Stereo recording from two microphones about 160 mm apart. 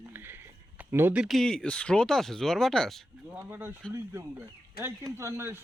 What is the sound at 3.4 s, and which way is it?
Speech, 15° right (ahead or behind).